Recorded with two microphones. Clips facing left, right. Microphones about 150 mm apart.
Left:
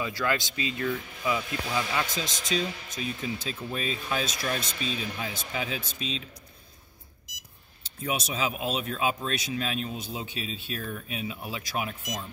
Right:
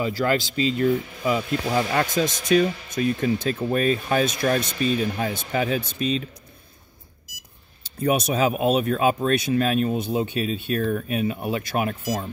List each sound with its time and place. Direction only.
0.0 s a man's voice: 35° right (ahead or behind)
1.7 s speech: 45° right (ahead or behind)
8.0 s speech: 55° right (ahead or behind)